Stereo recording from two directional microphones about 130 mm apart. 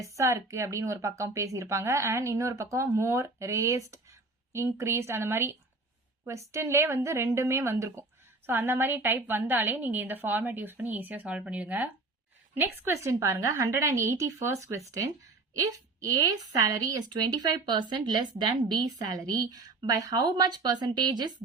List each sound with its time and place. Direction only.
0.0 s a woman's voice: 25° right (ahead or behind)